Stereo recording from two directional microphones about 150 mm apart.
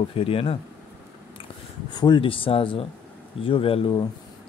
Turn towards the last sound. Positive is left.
turn(degrees=35)  # may be behind; listen again after turning